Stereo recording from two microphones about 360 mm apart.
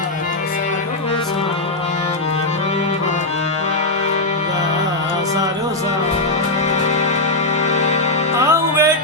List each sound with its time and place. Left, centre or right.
7.7 s music: centre
8.4 s music: centre